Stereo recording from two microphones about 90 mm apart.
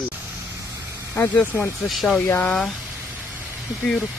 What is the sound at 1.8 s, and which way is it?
Speech, centre (ahead or behind).